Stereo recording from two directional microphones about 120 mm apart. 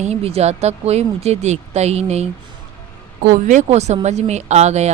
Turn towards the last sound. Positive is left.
turn(degrees=-65)  # may be behind; listen again after turning